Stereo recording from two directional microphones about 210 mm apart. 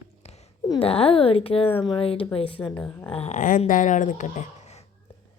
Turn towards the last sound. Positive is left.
turn(degrees=35)  # may be behind; listen again after turning